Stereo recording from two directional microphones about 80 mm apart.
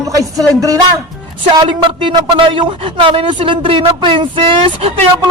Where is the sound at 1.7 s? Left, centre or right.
Right.